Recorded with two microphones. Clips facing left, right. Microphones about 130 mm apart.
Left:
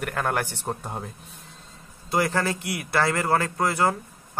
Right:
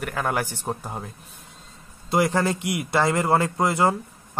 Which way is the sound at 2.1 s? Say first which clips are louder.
Right 3 dB; 20° right (ahead or behind).